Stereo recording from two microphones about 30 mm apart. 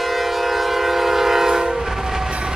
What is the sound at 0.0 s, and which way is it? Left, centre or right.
Train, centre.